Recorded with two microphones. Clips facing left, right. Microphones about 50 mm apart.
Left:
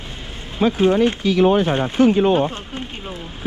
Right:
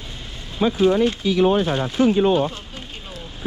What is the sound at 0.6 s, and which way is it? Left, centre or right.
Speech, left.